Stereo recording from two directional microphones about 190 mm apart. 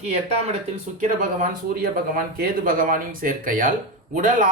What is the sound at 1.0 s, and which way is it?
A man's voice, 45° right (ahead or behind).